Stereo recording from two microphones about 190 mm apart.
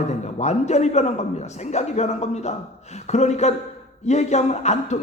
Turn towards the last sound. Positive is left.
turn(degrees=35)  # may be behind; listen again after turning